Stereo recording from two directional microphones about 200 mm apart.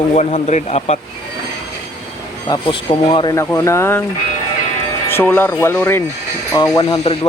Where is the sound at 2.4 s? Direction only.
25° left (ahead or behind).